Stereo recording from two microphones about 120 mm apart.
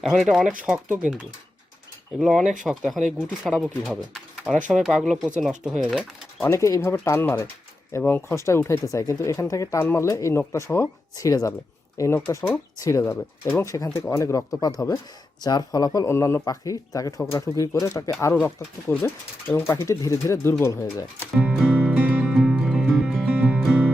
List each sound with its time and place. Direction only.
0.0 s speech: centre (ahead or behind)
4.1 s pigeon: 5° right (ahead or behind)
4.7 s speech: 5° right (ahead or behind)
5.8 s speech: 5° left (ahead or behind)
6.4 s speech: 25° left (ahead or behind)
8.4 s speech: 25° left (ahead or behind)
21.3 s music: 10° right (ahead or behind)